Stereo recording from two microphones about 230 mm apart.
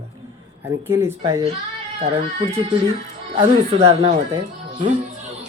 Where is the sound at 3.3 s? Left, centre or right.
Right.